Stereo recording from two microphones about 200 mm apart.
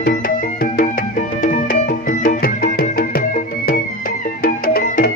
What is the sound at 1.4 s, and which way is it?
Music, 45° left (ahead or behind).